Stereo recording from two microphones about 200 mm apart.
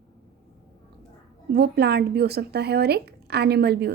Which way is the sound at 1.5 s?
55° right (ahead or behind).